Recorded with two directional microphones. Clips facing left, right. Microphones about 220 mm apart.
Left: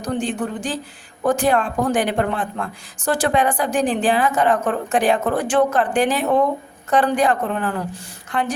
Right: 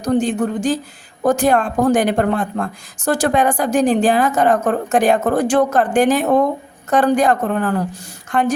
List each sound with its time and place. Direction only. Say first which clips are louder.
0.0 s speech: right 6 dB; 40° right (ahead or behind)